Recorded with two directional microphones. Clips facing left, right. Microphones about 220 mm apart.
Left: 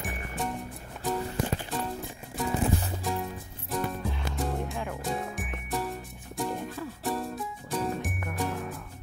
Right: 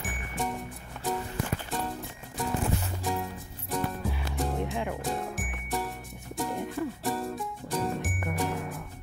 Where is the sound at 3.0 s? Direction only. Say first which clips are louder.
Even; centre (ahead or behind).